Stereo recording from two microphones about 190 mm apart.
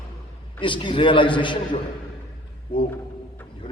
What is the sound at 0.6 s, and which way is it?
A man's voice, 25° left (ahead or behind).